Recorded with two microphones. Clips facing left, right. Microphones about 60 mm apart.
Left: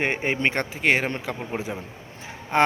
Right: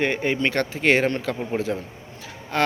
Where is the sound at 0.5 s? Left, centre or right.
Centre.